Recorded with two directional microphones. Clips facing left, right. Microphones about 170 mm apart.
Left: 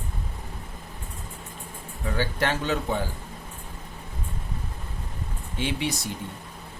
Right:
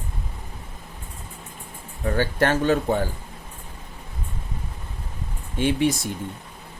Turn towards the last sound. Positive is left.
turn(degrees=-50)  # may be behind; listen again after turning